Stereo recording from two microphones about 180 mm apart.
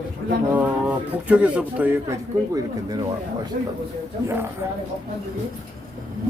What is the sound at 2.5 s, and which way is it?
Speech, 20° right (ahead or behind).